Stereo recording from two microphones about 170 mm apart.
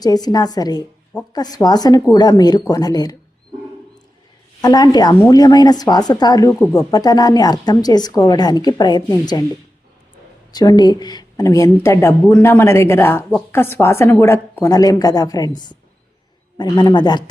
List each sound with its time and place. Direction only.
0.0 s speech: 20° left (ahead or behind)
4.6 s speech: 25° left (ahead or behind)
10.5 s speech: 25° left (ahead or behind)